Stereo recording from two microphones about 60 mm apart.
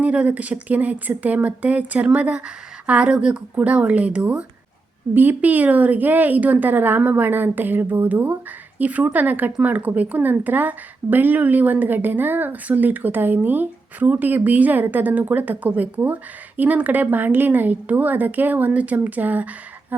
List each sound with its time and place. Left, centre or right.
0.0 s speech: right
5.1 s speech: right